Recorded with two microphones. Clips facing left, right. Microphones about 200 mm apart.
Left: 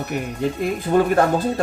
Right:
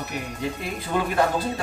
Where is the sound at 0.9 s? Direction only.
50° left (ahead or behind).